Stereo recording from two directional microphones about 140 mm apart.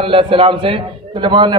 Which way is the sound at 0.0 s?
40° right (ahead or behind).